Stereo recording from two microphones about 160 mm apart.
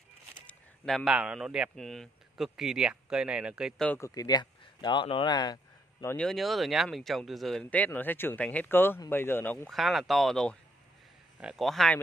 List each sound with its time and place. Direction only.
0.5 s speech: centre (ahead or behind)
3.8 s speech: 10° left (ahead or behind)
4.1 s speech: 25° left (ahead or behind)
6.1 s speech: centre (ahead or behind)
9.8 s speech: centre (ahead or behind)